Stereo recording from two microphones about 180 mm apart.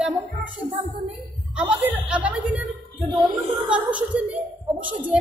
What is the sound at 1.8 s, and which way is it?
Speech, 5° right (ahead or behind).